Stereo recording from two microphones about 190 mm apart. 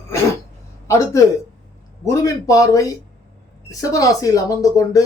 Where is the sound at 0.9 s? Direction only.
15° left (ahead or behind).